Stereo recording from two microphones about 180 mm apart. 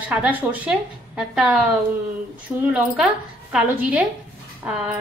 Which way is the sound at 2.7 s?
5° right (ahead or behind).